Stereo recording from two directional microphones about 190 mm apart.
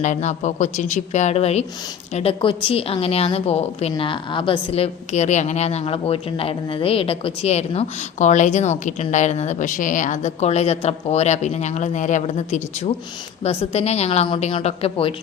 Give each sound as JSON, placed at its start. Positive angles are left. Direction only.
{"t": 0.0, "sound": "a woman's voice", "side_deg": 40}